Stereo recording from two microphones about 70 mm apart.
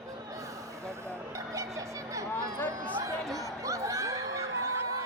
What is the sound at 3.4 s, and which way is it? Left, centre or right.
Music, right.